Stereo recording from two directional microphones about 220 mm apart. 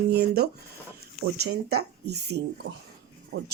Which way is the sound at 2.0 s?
50° right (ahead or behind).